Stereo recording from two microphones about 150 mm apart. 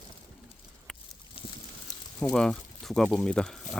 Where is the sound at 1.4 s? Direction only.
40° left (ahead or behind).